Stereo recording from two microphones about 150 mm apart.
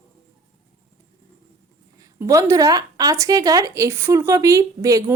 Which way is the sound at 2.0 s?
20° right (ahead or behind).